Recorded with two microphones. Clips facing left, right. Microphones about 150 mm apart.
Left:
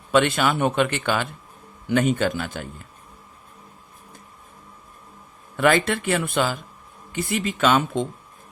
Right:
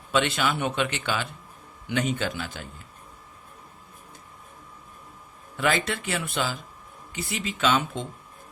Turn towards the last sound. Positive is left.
turn(degrees=50)  # may be behind; listen again after turning